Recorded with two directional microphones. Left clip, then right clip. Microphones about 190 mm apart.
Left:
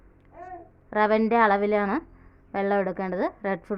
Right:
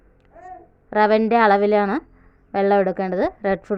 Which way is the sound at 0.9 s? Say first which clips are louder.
Right 5 dB; 20° right (ahead or behind).